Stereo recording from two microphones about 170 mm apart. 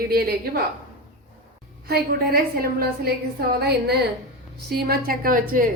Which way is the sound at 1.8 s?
65° right (ahead or behind).